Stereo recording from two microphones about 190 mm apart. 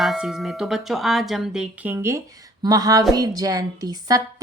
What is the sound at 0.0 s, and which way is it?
A woman's voice, centre (ahead or behind).